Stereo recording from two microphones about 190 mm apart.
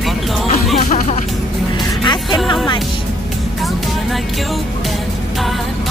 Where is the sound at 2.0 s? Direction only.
25° left (ahead or behind).